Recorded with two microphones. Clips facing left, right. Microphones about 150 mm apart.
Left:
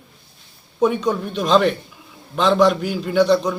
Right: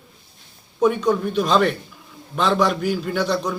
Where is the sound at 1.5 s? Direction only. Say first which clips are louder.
Left 5 dB; centre (ahead or behind).